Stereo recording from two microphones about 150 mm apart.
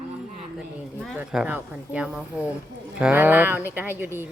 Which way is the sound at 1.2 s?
5° right (ahead or behind).